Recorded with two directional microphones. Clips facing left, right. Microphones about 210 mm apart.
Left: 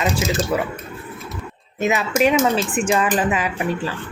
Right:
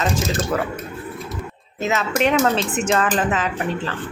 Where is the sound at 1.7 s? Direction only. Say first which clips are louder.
Left 2 dB; 15° left (ahead or behind).